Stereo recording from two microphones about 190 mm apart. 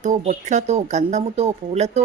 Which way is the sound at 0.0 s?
40° right (ahead or behind).